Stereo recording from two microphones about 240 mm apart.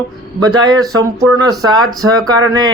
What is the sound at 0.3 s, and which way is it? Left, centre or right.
A man's voice, centre.